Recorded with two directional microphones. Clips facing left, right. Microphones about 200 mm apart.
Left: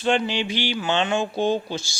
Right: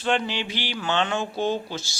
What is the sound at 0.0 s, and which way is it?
Speech, 15° left (ahead or behind).